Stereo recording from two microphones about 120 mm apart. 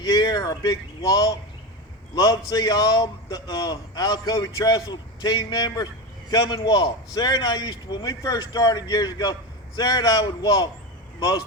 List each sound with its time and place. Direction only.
0.0 s a man's voice: 30° left (ahead or behind)